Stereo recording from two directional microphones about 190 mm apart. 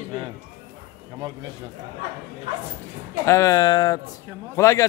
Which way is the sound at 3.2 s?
15° left (ahead or behind).